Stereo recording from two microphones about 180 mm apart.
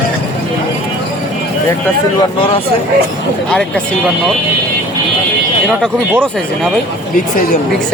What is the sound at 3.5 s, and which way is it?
Speech, 5° left (ahead or behind).